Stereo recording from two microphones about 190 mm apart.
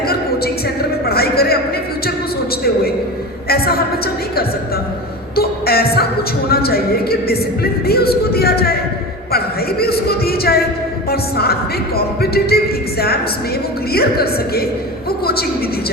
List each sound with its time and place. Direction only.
1.0 s speech: 55° left (ahead or behind)
3.5 s a woman's voice: 55° left (ahead or behind)
5.4 s music: 55° left (ahead or behind)
6.5 s a woman's voice: 55° left (ahead or behind)